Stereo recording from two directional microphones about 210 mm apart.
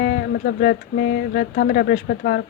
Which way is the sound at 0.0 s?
45° left (ahead or behind).